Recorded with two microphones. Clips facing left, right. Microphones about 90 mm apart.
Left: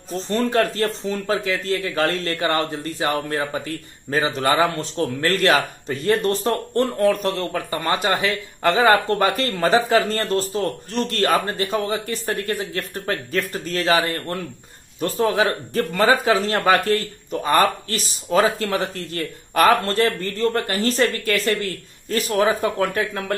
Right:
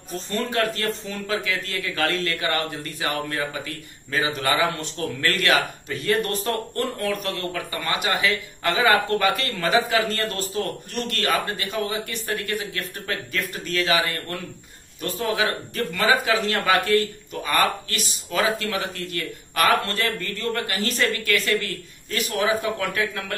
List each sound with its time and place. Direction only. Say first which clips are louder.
0.3 s speech: left 5 dB; 35° left (ahead or behind)